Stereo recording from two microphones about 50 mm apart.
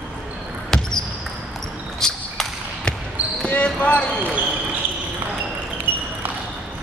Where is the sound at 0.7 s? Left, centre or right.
Centre.